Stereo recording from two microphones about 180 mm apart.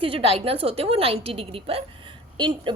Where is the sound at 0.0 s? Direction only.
30° right (ahead or behind).